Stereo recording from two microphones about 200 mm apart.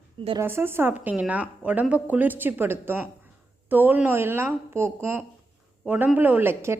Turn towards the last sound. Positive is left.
turn(degrees=-10)  # may be behind; listen again after turning